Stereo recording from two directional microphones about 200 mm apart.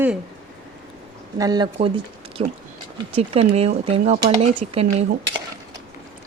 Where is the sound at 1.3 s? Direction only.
20° right (ahead or behind).